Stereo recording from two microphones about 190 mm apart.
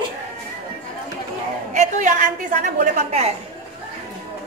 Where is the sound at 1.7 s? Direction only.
40° right (ahead or behind).